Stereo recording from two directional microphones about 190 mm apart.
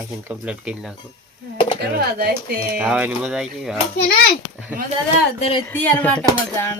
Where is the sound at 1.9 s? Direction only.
55° right (ahead or behind).